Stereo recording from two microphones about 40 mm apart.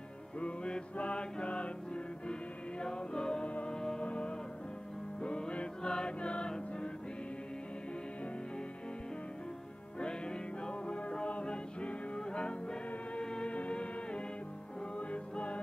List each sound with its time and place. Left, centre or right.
0.4 s music: left
0.9 s mantra: left
2.8 s music: left
4.0 s music: left
9.9 s music: left